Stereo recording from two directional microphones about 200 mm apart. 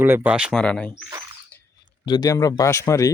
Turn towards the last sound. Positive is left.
turn(degrees=15)  # may be behind; listen again after turning